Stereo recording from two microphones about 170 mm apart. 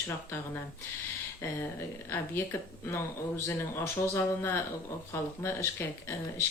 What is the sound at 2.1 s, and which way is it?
Speech, 15° left (ahead or behind).